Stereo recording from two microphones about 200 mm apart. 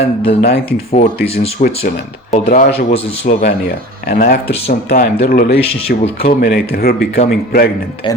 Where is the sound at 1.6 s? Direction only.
35° left (ahead or behind); by 7.7 s 60° left (ahead or behind).